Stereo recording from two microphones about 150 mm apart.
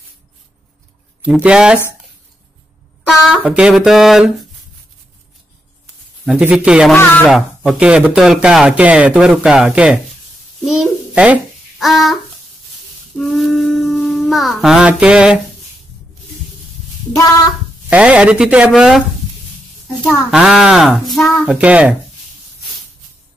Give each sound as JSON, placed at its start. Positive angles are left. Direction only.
{"t": 1.3, "sound": "speech", "side_deg": -5}
{"t": 3.1, "sound": "a sound", "side_deg": -5}
{"t": 6.2, "sound": "speech", "side_deg": -10}
{"t": 6.9, "sound": "speech", "side_deg": 10}
{"t": 7.2, "sound": "a child's voice", "side_deg": 0}
{"t": 13.2, "sound": "speech", "side_deg": 0}
{"t": 17.8, "sound": "speech", "side_deg": -10}
{"t": 20.1, "sound": "a child's voice", "side_deg": -5}